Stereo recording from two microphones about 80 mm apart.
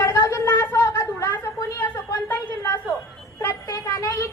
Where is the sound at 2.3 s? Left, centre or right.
Left.